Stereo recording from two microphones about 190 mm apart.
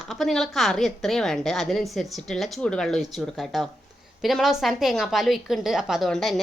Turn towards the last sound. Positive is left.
turn(degrees=0)  # may be behind; listen again after turning